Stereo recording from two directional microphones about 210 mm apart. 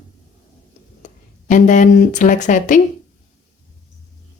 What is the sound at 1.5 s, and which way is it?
Speech, 35° left (ahead or behind).